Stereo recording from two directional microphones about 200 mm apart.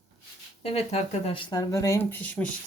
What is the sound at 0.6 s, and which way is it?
Speech, 30° left (ahead or behind).